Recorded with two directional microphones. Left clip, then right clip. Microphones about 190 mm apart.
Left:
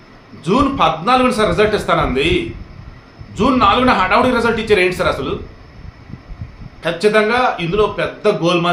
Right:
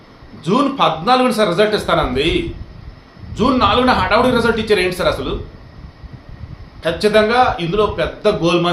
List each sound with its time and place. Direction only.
0.4 s a man's voice: 5° left (ahead or behind)
3.3 s a man's voice: 5° left (ahead or behind)
6.8 s a man's voice: centre (ahead or behind)